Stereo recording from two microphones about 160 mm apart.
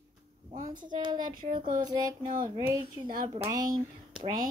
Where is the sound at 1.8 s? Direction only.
25° right (ahead or behind).